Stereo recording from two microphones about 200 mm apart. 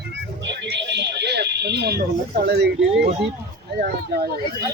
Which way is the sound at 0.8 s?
60° right (ahead or behind).